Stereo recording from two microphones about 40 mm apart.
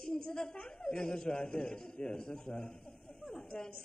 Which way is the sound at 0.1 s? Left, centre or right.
Centre.